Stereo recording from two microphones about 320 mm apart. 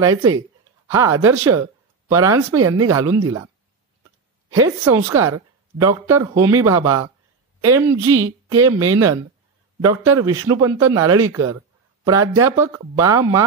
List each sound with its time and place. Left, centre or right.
0.0 s speech: centre
4.6 s speech: centre
11.2 s speech: right
12.0 s speech: centre